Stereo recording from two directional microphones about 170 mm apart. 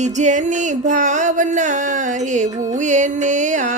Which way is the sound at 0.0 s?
45° right (ahead or behind).